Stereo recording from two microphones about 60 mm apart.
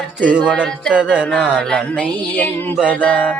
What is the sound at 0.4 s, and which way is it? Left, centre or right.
Music, centre.